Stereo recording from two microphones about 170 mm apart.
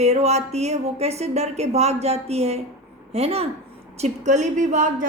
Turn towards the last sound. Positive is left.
turn(degrees=-45)  # may be behind; listen again after turning